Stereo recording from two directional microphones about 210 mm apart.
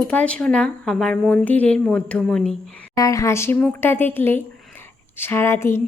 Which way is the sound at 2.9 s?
15° left (ahead or behind).